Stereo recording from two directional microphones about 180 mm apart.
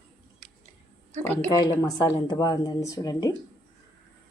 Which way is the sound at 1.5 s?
20° left (ahead or behind).